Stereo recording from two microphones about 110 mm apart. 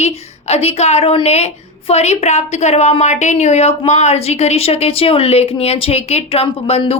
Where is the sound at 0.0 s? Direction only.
75° left (ahead or behind).